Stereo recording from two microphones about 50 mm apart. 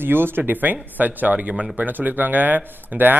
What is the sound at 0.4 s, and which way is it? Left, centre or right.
Speech, right.